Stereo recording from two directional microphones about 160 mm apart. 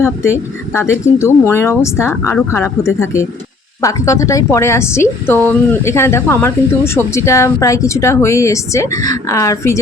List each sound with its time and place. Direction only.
0.0 s a woman's voice: 15° left (ahead or behind)